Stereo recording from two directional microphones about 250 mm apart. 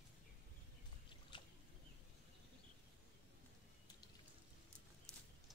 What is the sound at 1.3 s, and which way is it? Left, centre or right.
Boat, centre.